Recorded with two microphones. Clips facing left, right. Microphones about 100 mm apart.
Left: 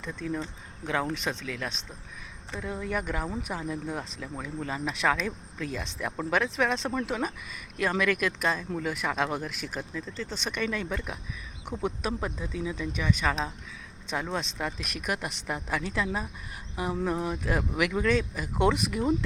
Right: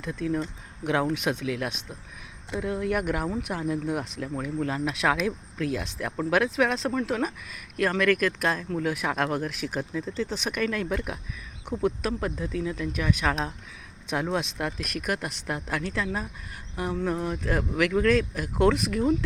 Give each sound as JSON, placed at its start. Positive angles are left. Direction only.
{"t": 0.0, "sound": "speech", "side_deg": -5}